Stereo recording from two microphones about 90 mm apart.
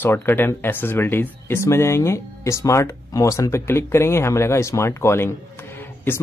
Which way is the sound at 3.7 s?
30° left (ahead or behind).